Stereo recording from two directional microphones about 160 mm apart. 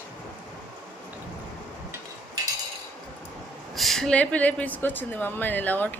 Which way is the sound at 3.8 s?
Centre (ahead or behind).